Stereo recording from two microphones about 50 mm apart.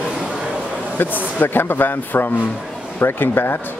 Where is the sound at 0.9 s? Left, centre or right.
Left.